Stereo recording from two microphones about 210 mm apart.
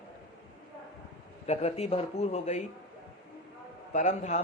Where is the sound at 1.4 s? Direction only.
30° left (ahead or behind).